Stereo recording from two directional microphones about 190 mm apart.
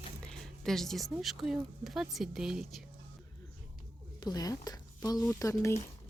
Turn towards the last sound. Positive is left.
turn(degrees=15)  # may be behind; listen again after turning